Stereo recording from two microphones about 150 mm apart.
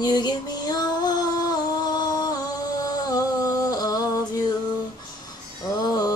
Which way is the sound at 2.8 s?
25° left (ahead or behind).